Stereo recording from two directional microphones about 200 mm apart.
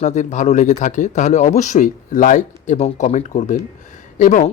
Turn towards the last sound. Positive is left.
turn(degrees=40)  # may be behind; listen again after turning